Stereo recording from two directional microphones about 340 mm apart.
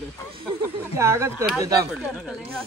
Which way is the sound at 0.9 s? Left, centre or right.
Centre.